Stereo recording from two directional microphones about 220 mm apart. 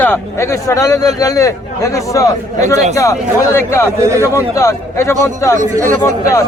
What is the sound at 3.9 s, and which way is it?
Speech, 15° right (ahead or behind).